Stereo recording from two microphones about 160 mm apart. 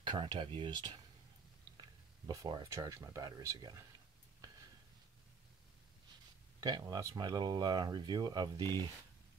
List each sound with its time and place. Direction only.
0.0 s speech: 30° right (ahead or behind)
6.6 s speech: 25° right (ahead or behind)